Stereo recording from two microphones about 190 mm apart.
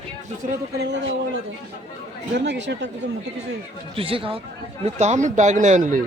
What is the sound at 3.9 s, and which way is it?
Speech, 30° right (ahead or behind).